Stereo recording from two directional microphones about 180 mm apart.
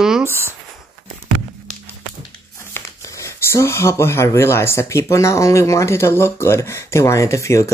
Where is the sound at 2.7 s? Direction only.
15° left (ahead or behind).